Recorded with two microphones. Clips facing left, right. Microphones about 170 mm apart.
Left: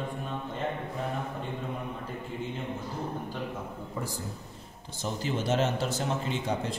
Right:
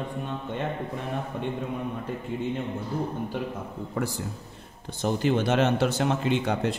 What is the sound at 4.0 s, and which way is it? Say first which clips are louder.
Speech: right 7 dB; 75° right (ahead or behind).